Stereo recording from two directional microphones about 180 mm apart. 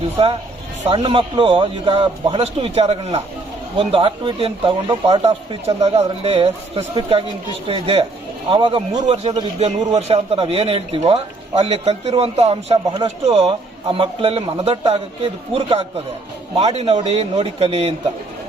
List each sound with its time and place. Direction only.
0.2 s a man's voice: 30° right (ahead or behind)